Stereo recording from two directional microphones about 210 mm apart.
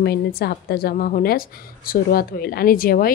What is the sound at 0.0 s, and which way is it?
A woman's voice, 50° left (ahead or behind).